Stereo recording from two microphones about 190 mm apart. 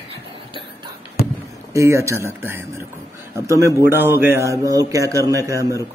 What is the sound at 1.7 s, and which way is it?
A man's voice, 15° right (ahead or behind).